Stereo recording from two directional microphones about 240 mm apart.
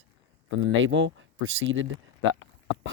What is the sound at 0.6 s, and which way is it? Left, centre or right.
Speech, right.